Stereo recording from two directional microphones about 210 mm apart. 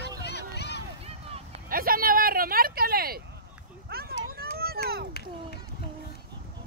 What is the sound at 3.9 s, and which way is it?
Children playing, 45° right (ahead or behind).